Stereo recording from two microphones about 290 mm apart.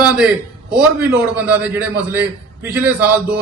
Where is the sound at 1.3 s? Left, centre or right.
Centre.